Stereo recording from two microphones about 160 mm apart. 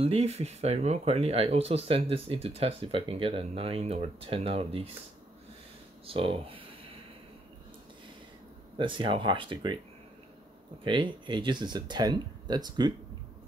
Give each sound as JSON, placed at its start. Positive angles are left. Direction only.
{"t": 0.0, "sound": "speech", "side_deg": -40}
{"t": 6.0, "sound": "speech", "side_deg": -35}
{"t": 8.7, "sound": "speech", "side_deg": -30}
{"t": 10.8, "sound": "speech", "side_deg": -30}